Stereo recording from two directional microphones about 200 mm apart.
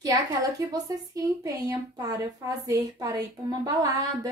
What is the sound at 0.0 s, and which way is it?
A woman's voice, 15° right (ahead or behind).